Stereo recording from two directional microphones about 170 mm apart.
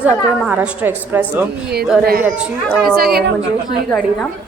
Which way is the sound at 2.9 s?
65° right (ahead or behind).